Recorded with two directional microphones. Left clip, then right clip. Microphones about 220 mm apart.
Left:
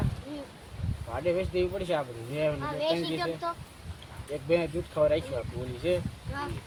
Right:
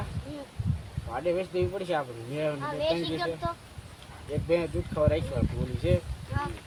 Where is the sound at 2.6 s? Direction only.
20° left (ahead or behind).